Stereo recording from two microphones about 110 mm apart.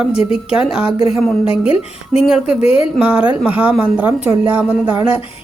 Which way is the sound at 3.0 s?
10° right (ahead or behind).